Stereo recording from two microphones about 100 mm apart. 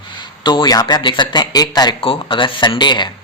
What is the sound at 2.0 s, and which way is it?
A man's voice, 60° left (ahead or behind).